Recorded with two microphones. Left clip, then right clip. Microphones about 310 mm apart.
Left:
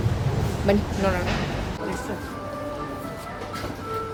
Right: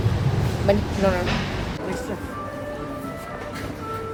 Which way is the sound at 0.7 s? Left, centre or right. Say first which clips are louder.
Right 2 dB; centre.